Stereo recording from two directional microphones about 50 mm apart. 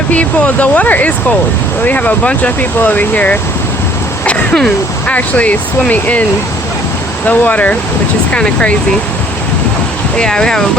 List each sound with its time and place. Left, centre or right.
0.1 s speech: left
4.3 s a sound: centre
5.0 s speech: left
7.3 s speech: left
8.3 s speech: left
10.2 s speech: centre